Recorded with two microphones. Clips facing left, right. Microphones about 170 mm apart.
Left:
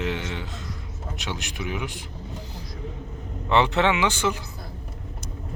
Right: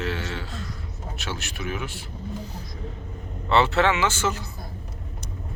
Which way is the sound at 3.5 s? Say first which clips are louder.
Even; 15° left (ahead or behind).